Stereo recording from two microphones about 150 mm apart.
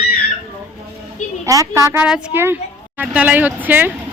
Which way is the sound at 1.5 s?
20° right (ahead or behind).